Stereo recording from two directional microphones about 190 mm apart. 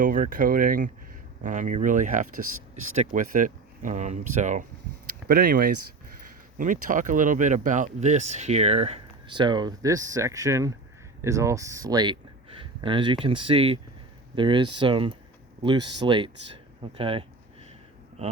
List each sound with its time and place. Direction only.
0.0 s speech: 45° right (ahead or behind)
5.3 s speech: 50° right (ahead or behind); by 17.2 s 30° right (ahead or behind)